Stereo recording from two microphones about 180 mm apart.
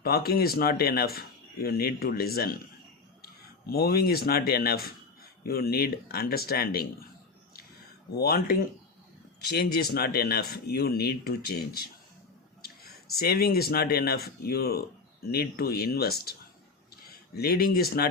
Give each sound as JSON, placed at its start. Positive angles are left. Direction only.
{"t": 0.0, "sound": "speech", "side_deg": 60}
{"t": 3.7, "sound": "speech", "side_deg": 60}
{"t": 8.1, "sound": "speech", "side_deg": 60}
{"t": 17.3, "sound": "speech", "side_deg": 60}